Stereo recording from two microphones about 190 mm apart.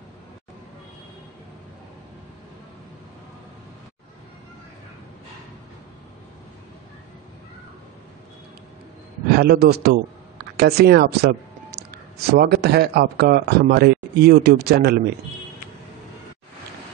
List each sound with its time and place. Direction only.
9.3 s a man's voice: 55° right (ahead or behind)